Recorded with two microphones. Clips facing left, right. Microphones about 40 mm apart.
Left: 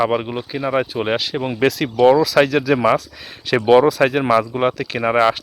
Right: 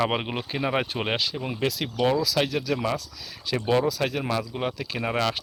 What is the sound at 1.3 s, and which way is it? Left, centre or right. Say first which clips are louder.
Speech: left 10 dB; left.